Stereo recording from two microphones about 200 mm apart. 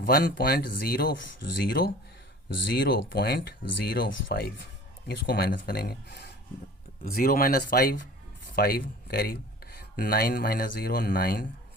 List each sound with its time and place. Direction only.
0.0 s speech: 50° left (ahead or behind)
2.6 s speech: 50° left (ahead or behind)
8.5 s cutlery: 50° left (ahead or behind)